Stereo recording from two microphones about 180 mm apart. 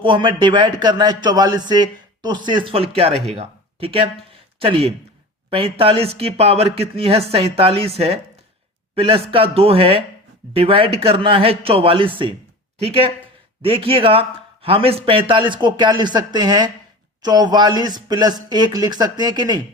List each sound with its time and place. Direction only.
0.0 s speech: 25° right (ahead or behind)